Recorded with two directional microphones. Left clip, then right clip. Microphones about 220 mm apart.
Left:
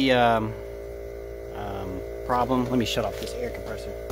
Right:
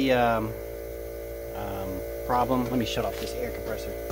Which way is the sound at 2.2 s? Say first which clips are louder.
Left 1 dB; 25° left (ahead or behind).